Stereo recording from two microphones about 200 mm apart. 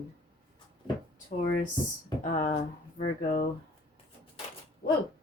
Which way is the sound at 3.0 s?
50° left (ahead or behind).